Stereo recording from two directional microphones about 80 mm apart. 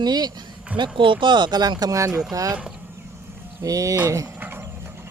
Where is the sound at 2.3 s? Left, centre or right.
Right.